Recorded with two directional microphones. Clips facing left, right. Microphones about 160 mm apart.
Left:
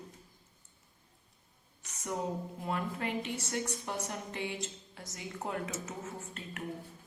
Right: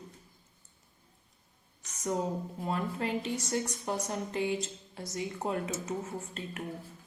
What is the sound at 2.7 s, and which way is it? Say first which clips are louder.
Speech: right 3 dB; 35° right (ahead or behind).